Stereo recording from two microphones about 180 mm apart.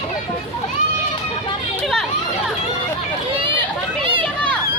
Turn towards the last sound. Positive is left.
turn(degrees=-30)  # may be behind; listen again after turning